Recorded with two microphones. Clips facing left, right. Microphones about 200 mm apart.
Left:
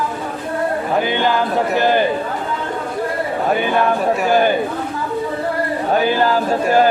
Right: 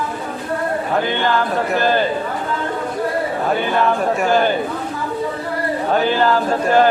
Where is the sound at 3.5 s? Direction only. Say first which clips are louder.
Left 1 dB; 15° left (ahead or behind).